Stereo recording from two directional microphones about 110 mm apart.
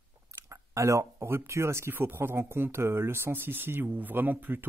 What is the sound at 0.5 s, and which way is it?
Speech, 30° right (ahead or behind).